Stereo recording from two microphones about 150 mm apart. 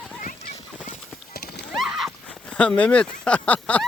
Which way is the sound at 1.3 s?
90° left.